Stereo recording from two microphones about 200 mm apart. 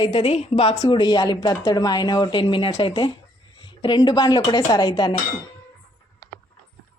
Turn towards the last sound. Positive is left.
turn(degrees=15)  # may be behind; listen again after turning